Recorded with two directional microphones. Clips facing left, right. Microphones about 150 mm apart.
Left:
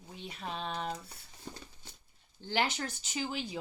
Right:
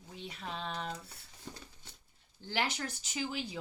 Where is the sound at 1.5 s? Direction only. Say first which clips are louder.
Left 2 dB; 20° left (ahead or behind).